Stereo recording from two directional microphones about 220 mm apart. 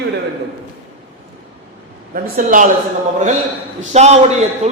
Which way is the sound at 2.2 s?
40° right (ahead or behind).